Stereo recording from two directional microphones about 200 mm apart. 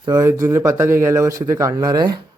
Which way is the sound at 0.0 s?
15° right (ahead or behind).